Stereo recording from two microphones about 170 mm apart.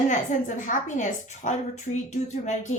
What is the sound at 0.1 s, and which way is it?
Speech, 45° left (ahead or behind).